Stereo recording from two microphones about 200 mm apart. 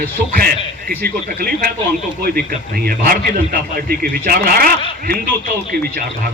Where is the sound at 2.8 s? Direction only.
45° right (ahead or behind).